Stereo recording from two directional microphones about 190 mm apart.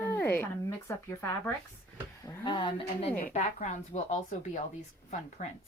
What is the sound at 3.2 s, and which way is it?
Speech, 40° left (ahead or behind).